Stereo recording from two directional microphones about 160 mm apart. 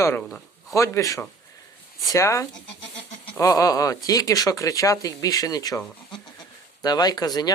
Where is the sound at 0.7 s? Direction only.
20° left (ahead or behind).